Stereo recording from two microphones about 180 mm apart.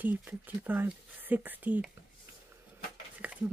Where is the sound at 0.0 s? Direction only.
10° right (ahead or behind).